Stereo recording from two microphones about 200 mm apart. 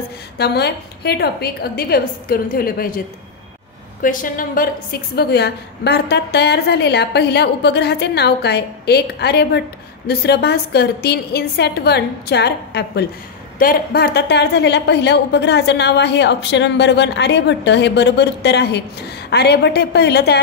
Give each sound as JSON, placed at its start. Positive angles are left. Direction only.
{"t": 0.4, "sound": "a woman's voice", "side_deg": 55}
{"t": 4.0, "sound": "a woman's voice", "side_deg": 40}